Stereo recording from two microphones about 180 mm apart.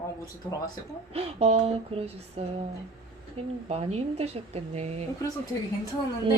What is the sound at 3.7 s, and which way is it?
A woman's voice, 35° right (ahead or behind).